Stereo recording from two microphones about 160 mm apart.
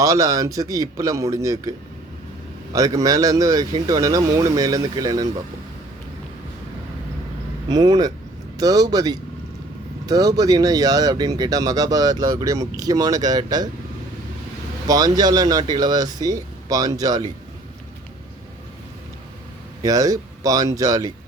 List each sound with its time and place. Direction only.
0.0 s speech: 20° right (ahead or behind)
2.7 s speech: 20° right (ahead or behind)
7.7 s speech: 25° right (ahead or behind)
14.8 s speech: 25° right (ahead or behind)
19.8 s speech: 20° right (ahead or behind)